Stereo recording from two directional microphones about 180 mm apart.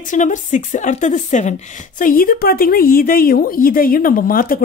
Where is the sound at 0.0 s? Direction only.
45° left (ahead or behind).